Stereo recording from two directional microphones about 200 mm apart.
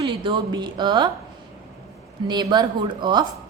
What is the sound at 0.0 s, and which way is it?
Speech, 25° right (ahead or behind).